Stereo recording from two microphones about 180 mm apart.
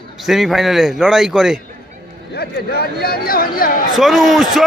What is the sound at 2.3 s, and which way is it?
Speech, 65° left (ahead or behind).